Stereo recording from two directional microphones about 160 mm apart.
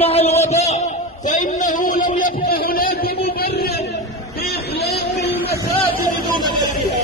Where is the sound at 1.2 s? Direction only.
50° left (ahead or behind).